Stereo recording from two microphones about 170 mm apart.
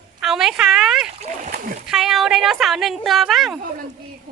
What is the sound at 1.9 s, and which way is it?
A woman's voice, centre (ahead or behind).